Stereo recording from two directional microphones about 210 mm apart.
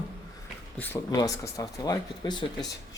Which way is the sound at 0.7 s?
10° left (ahead or behind).